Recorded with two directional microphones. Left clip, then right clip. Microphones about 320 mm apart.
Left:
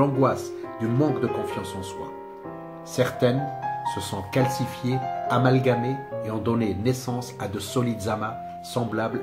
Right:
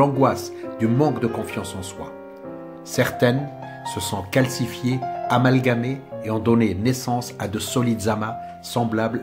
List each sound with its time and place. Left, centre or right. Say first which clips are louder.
0.0 s speech: right 4 dB; right
3.0 s speech: right 3 dB; right